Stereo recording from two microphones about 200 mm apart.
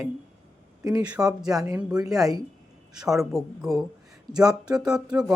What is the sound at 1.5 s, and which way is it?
Speech, 15° right (ahead or behind).